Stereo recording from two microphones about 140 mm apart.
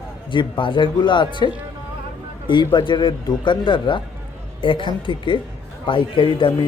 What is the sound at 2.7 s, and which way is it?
A man's voice, 35° left (ahead or behind).